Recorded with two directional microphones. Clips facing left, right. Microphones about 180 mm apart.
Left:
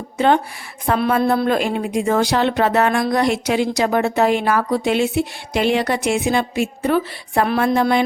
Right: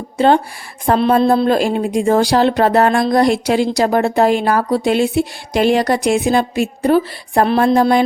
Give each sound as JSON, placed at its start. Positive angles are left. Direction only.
{"t": 0.9, "sound": "a woman's voice", "side_deg": -30}